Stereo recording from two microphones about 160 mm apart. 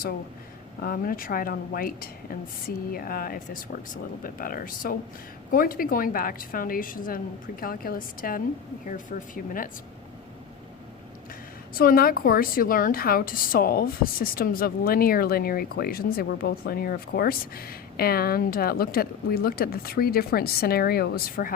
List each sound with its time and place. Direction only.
0.8 s a woman's voice: 65° left (ahead or behind)
11.7 s a woman's voice: 65° left (ahead or behind)